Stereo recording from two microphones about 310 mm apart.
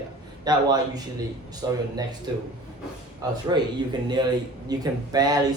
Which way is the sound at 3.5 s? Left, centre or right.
Centre.